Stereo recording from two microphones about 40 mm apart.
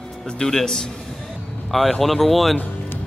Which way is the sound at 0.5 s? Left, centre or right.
Centre.